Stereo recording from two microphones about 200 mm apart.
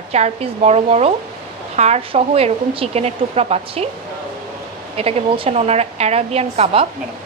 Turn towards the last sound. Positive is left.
turn(degrees=-30)  # may be behind; listen again after turning